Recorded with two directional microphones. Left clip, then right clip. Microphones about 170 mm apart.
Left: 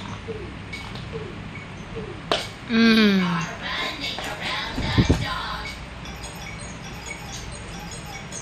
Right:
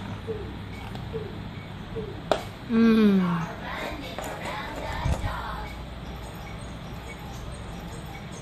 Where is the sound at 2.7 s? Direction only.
10° right (ahead or behind).